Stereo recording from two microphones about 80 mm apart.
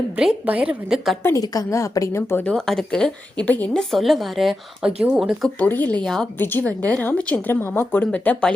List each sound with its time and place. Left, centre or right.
0.4 s a woman's voice: centre
1.4 s a woman's voice: left
2.5 s a woman's voice: centre
3.4 s a woman's voice: left
3.8 s a woman's voice: centre
5.5 s a woman's voice: left
6.0 s a woman's voice: centre
6.4 s a woman's voice: left